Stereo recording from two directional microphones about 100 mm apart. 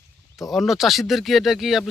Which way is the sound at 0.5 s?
Centre (ahead or behind).